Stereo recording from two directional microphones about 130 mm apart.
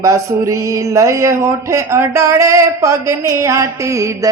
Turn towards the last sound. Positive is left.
turn(degrees=-25)  # may be behind; listen again after turning